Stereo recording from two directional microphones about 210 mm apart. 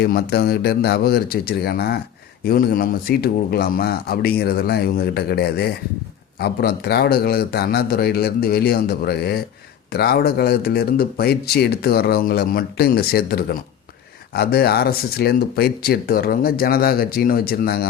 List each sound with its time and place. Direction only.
0.0 s speech: 50° left (ahead or behind)